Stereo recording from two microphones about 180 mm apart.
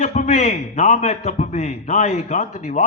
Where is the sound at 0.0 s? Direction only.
40° left (ahead or behind).